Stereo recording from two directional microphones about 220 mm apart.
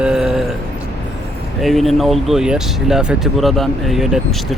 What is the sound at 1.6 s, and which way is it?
Speech, centre (ahead or behind).